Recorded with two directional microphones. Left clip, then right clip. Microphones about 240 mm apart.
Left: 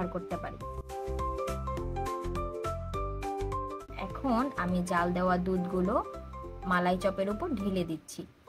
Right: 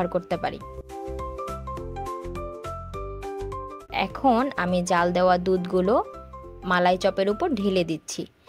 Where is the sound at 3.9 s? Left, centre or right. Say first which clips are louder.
Right 11 dB; right.